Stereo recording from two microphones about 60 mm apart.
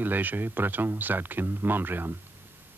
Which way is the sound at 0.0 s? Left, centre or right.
Right.